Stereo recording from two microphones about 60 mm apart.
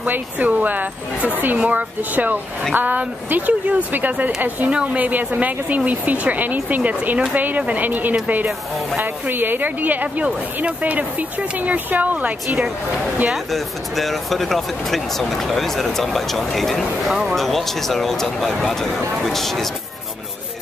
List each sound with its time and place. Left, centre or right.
0.0 s speech: right
13.3 s speech: centre
17.4 s speech: centre